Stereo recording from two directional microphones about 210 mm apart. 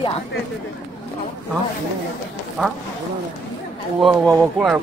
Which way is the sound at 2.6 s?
Centre (ahead or behind).